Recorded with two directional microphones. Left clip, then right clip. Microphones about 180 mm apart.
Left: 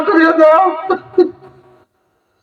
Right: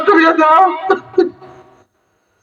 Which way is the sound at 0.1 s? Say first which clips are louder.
Even; 20° right (ahead or behind).